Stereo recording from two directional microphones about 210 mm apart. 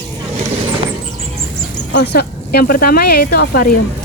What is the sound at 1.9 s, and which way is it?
Speech, 50° left (ahead or behind).